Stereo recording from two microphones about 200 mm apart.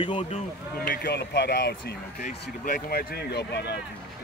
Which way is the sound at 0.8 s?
45° left (ahead or behind).